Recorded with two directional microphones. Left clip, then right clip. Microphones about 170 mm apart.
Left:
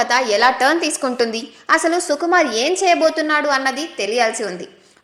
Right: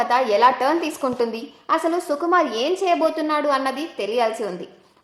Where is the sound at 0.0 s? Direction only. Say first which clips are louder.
Left 2 dB; 10° left (ahead or behind).